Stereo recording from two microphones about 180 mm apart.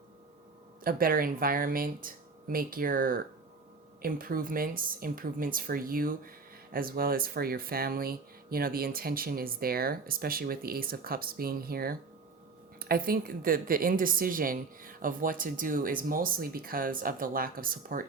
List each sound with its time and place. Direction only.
0.9 s speech: 55° right (ahead or behind)